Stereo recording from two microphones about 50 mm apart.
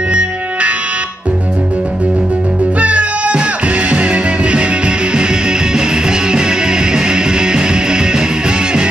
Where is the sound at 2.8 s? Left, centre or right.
Right.